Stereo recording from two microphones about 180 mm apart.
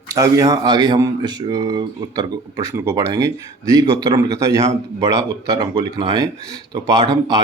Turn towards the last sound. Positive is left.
turn(degrees=-20)  # may be behind; listen again after turning